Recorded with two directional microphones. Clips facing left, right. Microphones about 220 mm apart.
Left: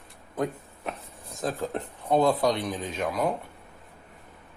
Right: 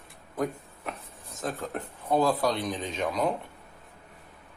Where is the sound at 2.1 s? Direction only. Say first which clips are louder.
Left 2 dB; 20° left (ahead or behind); by 3.3 s 5° left (ahead or behind).